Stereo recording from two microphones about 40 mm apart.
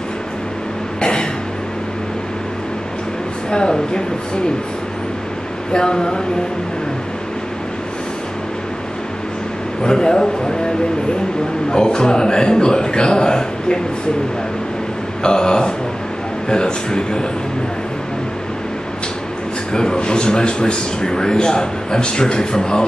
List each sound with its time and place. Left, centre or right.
3.4 s speech: left
5.7 s speech: left
9.8 s a man's voice: centre
11.7 s speech: centre
15.2 s speech: centre
19.7 s speech: centre